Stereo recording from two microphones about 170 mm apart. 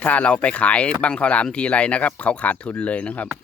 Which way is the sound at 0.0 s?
10° left (ahead or behind).